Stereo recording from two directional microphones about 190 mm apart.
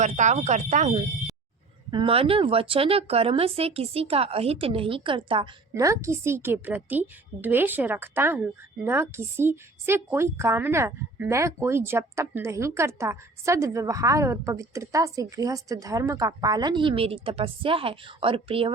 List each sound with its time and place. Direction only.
0.0 s speech: 40° right (ahead or behind)
1.9 s a woman's voice: 25° right (ahead or behind)